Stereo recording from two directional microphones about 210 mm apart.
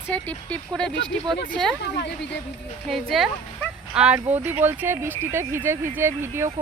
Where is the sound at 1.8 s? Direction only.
55° left (ahead or behind).